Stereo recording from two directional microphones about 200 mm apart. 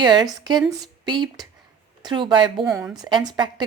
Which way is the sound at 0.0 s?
20° right (ahead or behind).